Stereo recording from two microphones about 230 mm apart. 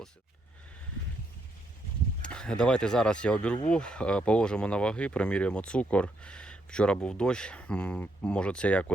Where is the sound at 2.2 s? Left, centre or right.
Centre.